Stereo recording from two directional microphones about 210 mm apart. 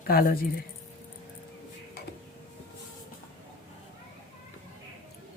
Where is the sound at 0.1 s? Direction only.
40° left (ahead or behind).